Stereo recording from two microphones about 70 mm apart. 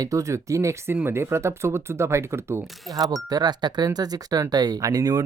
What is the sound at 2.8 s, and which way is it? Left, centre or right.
Speech, right.